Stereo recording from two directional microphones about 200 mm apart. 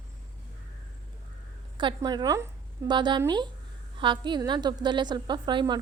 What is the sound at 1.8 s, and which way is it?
A woman's voice, 20° right (ahead or behind).